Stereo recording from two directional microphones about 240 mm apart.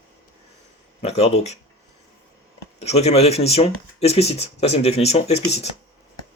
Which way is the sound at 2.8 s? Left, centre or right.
Left.